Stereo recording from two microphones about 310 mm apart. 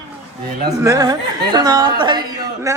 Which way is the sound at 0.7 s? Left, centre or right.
Centre.